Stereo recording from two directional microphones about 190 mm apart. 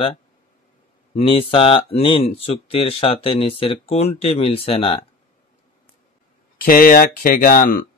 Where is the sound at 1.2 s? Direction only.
30° left (ahead or behind).